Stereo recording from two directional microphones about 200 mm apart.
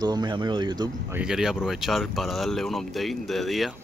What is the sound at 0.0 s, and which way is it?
Speech, 20° right (ahead or behind).